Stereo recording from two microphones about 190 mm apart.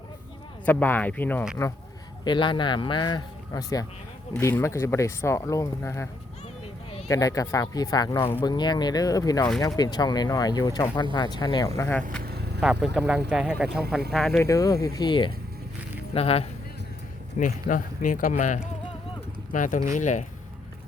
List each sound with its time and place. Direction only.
0.6 s speech: 10° left (ahead or behind)
2.2 s speech: 25° left (ahead or behind)
7.1 s speech: 20° left (ahead or behind)
11.8 s speech: 10° left (ahead or behind)
12.2 s vehicle: 55° right (ahead or behind)
12.8 s speech: 5° right (ahead or behind)
14.3 s speech: 15° left (ahead or behind); by 16.5 s 30° left (ahead or behind)
17.3 s speech: 45° left (ahead or behind)